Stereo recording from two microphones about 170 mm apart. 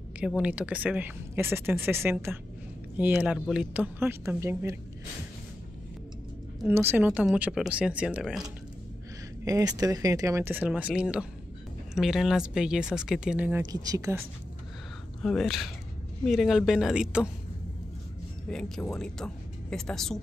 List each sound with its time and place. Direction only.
0.2 s a woman's voice: 5° right (ahead or behind)
6.7 s a woman's voice: 15° right (ahead or behind)
9.4 s a woman's voice: 20° right (ahead or behind)
13.7 s speech: 20° right (ahead or behind)
15.2 s speech: centre (ahead or behind)
18.5 s speech: 5° left (ahead or behind)